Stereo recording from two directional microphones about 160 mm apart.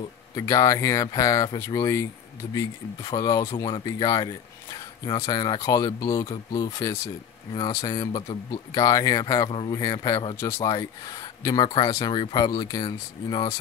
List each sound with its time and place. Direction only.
0.4 s speech: 20° left (ahead or behind)